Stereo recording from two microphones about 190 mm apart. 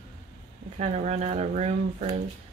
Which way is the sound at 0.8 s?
35° right (ahead or behind).